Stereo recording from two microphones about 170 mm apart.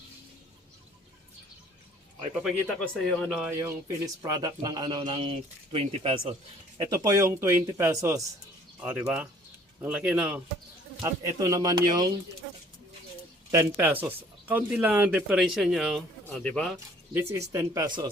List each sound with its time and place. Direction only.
2.6 s speech: 5° left (ahead or behind)
3.6 s speech: 20° right (ahead or behind); by 6.3 s 35° right (ahead or behind)
6.7 s speech: 20° right (ahead or behind); by 10.4 s 5° right (ahead or behind)
11.0 s speech: 20° right (ahead or behind)
13.5 s speech: 15° right (ahead or behind)
16.2 s speech: 10° left (ahead or behind)
17.2 s speech: 15° right (ahead or behind)